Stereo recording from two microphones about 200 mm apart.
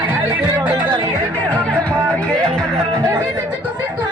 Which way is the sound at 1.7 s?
5° left (ahead or behind).